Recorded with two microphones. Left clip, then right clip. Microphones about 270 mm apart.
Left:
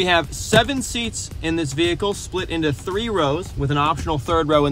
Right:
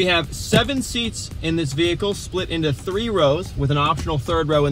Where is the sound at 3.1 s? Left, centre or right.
Centre.